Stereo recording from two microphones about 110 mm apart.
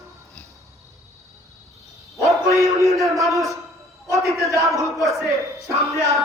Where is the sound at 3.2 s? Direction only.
Centre (ahead or behind).